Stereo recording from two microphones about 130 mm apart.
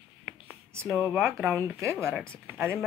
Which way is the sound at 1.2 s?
15° right (ahead or behind).